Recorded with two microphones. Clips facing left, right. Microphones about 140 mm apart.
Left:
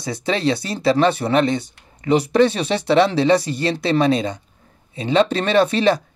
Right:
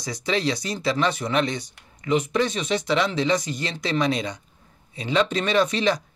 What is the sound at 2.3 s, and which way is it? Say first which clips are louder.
Speech: left 8 dB; 65° left (ahead or behind).